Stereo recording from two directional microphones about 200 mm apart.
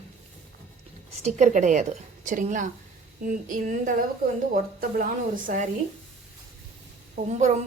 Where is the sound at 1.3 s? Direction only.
40° right (ahead or behind).